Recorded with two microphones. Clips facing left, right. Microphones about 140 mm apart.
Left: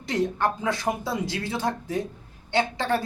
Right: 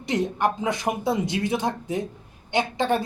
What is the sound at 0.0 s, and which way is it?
Speech, 20° right (ahead or behind).